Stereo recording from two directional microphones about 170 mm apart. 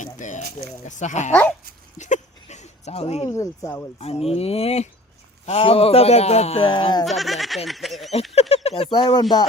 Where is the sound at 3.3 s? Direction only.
20° left (ahead or behind).